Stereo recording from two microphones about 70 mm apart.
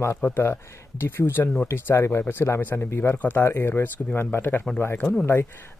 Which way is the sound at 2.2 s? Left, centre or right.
Left.